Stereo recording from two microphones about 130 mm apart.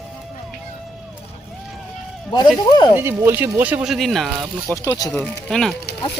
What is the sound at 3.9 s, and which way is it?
Speech, centre (ahead or behind).